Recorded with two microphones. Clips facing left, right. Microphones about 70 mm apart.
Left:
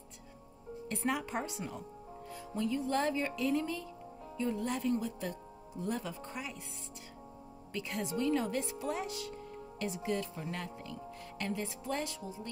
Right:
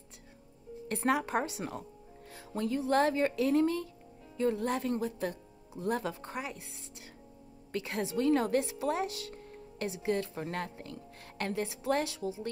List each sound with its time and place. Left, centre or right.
0.8 s a woman's voice: right
7.7 s a woman's voice: right